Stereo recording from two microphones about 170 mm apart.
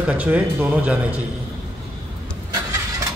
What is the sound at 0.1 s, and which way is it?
Speech, 10° right (ahead or behind).